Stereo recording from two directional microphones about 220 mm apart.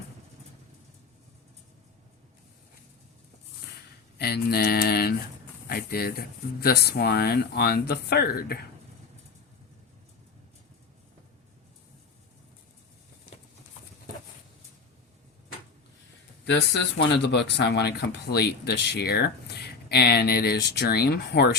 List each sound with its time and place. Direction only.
4.2 s speech: 45° left (ahead or behind)
16.5 s speech: 50° left (ahead or behind)